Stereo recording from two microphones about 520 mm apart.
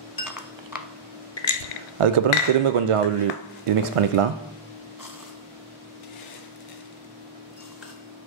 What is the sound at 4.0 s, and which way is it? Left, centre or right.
Speech, right.